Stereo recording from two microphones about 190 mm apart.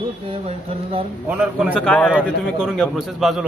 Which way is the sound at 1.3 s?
5° right (ahead or behind).